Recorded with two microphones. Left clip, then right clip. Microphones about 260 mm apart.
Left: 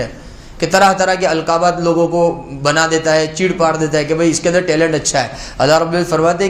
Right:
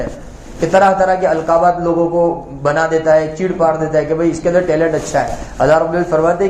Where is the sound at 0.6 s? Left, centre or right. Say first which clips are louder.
Right 1 dB; left.